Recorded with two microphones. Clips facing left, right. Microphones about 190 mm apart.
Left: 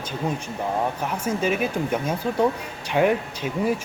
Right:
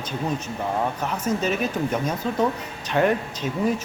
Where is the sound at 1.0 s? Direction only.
10° left (ahead or behind).